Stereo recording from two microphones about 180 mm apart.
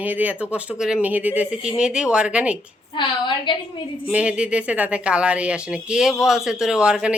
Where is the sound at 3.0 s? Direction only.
25° left (ahead or behind).